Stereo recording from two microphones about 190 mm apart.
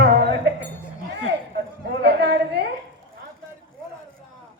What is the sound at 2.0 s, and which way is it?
Chatter, 60° right (ahead or behind).